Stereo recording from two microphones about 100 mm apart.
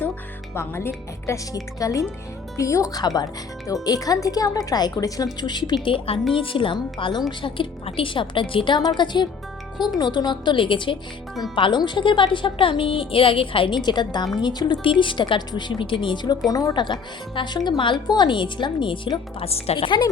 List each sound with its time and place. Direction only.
0.5 s a woman's voice: 25° left (ahead or behind); by 5.7 s 45° left (ahead or behind)
5.8 s a woman's voice: 65° left (ahead or behind)
10.0 s a woman's voice: 45° left (ahead or behind)
13.8 s a woman's voice: 45° left (ahead or behind)
16.8 s speech: 50° left (ahead or behind)
19.5 s a woman's voice: 75° left (ahead or behind)